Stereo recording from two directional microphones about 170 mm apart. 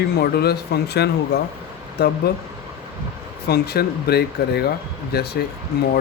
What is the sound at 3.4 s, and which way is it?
Speech, 70° left (ahead or behind).